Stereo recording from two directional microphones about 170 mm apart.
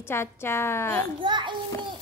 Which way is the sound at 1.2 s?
25° right (ahead or behind).